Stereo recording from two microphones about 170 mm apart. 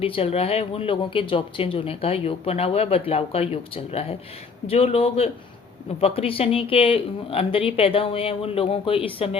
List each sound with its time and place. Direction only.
0.0 s speech: 35° left (ahead or behind)